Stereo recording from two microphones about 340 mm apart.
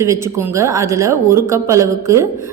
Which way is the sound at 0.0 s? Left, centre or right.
Centre.